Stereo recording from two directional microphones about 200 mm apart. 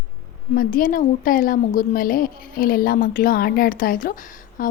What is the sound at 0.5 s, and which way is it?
A woman's voice, 45° left (ahead or behind).